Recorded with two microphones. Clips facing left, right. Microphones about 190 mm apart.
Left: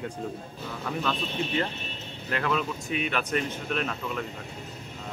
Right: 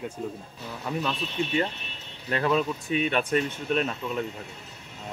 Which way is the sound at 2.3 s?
30° right (ahead or behind).